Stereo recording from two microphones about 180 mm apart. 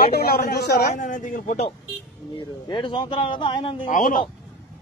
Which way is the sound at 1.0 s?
45° left (ahead or behind).